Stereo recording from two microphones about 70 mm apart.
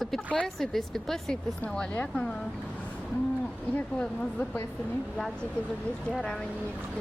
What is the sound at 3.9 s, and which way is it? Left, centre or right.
Speech, centre.